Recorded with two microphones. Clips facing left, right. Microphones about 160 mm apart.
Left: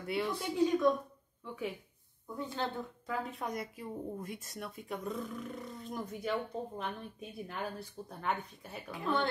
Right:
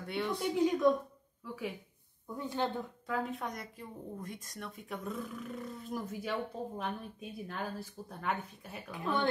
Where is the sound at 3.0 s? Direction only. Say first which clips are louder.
Right 2 dB; centre (ahead or behind).